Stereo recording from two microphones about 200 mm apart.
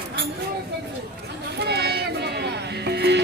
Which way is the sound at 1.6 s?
55° right (ahead or behind).